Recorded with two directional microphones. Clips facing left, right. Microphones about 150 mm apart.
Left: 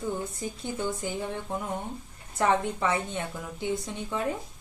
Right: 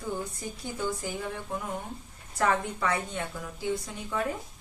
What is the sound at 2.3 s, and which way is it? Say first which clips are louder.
A woman's voice: left 2 dB; 20° left (ahead or behind).